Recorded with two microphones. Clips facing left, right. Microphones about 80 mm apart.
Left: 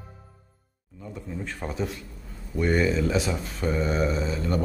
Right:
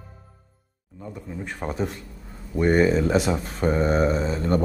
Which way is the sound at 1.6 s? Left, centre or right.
Right.